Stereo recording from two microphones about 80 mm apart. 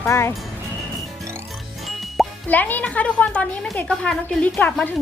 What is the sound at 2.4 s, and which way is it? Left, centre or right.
A woman's voice, left.